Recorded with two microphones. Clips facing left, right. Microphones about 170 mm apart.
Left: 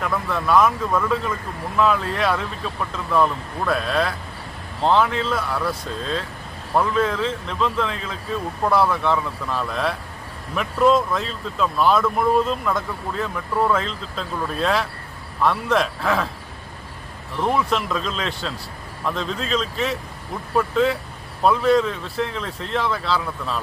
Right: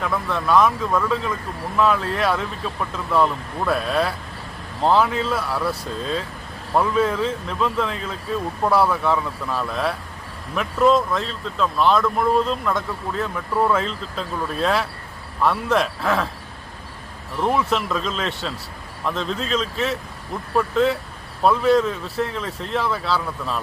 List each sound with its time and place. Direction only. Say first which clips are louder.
0.0 s speech: even; centre (ahead or behind)
17.4 s speech: even; centre (ahead or behind)